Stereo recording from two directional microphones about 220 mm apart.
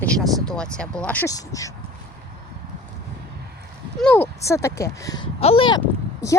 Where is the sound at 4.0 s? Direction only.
10° left (ahead or behind); by 5.8 s 25° left (ahead or behind).